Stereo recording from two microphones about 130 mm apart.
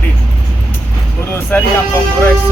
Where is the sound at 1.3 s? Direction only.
15° left (ahead or behind).